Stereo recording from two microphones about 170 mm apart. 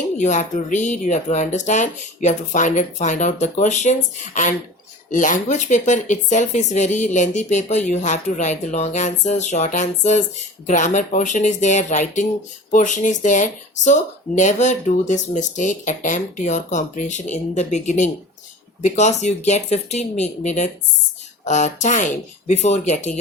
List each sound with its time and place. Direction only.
0.2 s speech: 45° left (ahead or behind)